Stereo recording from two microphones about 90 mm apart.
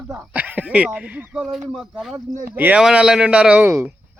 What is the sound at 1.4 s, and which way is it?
Speech, centre (ahead or behind).